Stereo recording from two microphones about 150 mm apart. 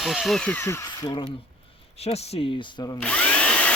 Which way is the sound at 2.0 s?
45° left (ahead or behind).